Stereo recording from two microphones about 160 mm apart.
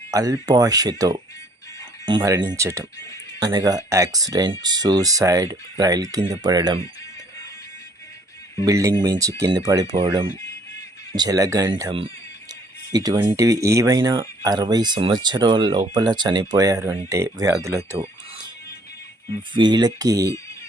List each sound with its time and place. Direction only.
0.1 s speech: 20° right (ahead or behind)
8.6 s speech: 20° right (ahead or behind)
12.9 s speech: 25° right (ahead or behind)
19.5 s speech: 25° right (ahead or behind)